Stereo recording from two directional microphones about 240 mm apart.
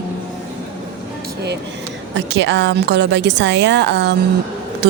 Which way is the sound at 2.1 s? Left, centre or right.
Right.